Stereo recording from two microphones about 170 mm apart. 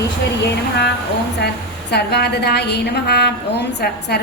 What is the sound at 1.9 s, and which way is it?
A woman's voice, 75° left (ahead or behind).